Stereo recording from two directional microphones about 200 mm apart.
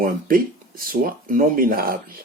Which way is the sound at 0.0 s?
45° right (ahead or behind).